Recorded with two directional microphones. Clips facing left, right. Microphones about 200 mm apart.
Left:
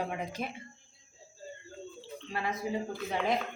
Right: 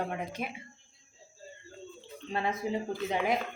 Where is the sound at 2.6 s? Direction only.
20° right (ahead or behind).